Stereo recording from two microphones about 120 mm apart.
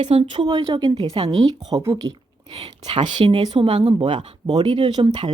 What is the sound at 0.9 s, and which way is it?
Speech, 55° right (ahead or behind).